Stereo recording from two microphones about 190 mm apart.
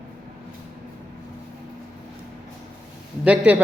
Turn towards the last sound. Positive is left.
turn(degrees=-10)  # may be behind; listen again after turning